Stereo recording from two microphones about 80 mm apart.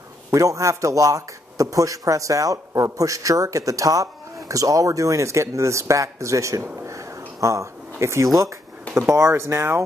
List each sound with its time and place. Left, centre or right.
0.3 s speech: right